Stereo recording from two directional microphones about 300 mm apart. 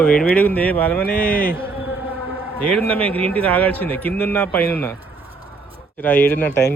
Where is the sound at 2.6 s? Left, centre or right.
Centre.